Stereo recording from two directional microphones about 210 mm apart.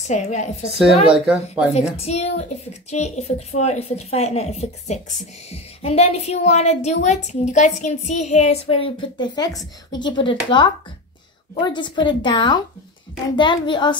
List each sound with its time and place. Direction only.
0.0 s a woman's voice: 35° left (ahead or behind)
1.0 s speech: 5° right (ahead or behind)
2.0 s a woman's voice: 30° left (ahead or behind)